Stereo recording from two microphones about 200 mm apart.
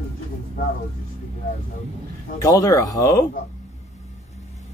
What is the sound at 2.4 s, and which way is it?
Speech, 15° left (ahead or behind).